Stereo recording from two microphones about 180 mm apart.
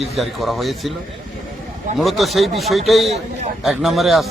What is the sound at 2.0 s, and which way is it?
A man's voice, centre (ahead or behind).